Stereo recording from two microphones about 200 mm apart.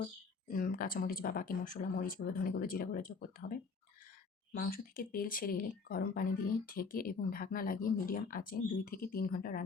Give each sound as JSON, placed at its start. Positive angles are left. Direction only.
{"t": 0.0, "sound": "speech", "side_deg": 45}
{"t": 4.5, "sound": "speech", "side_deg": 45}